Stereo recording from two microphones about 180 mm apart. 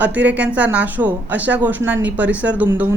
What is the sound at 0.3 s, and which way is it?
A woman's voice, 10° right (ahead or behind).